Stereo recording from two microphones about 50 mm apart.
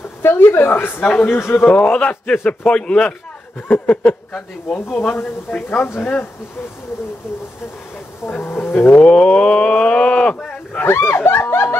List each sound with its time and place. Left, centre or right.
0.2 s speech: left
1.7 s a man's voice: left
3.6 s speech: left
5.5 s speech: left
8.3 s speech: left
9.0 s speech: centre
10.8 s speech: left